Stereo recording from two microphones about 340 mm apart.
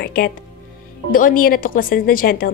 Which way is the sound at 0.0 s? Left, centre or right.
Left.